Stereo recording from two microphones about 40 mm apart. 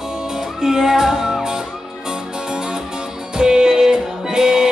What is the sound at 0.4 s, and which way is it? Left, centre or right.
Music, centre.